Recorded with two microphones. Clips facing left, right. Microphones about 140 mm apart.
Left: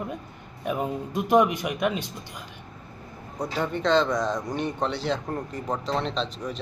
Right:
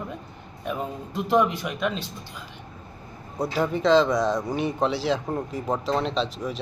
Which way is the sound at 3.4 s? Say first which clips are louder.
Right 3 dB; 5° right (ahead or behind).